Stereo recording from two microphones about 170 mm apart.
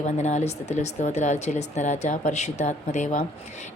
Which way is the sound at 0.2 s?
40° left (ahead or behind).